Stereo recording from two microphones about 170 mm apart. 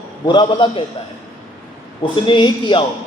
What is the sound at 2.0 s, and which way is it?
Speech, 30° left (ahead or behind).